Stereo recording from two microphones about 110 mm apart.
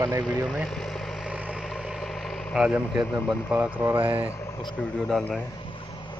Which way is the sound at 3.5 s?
20° right (ahead or behind).